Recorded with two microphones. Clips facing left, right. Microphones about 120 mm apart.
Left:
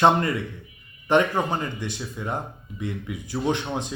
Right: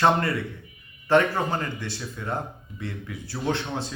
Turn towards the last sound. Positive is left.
turn(degrees=15)  # may be behind; listen again after turning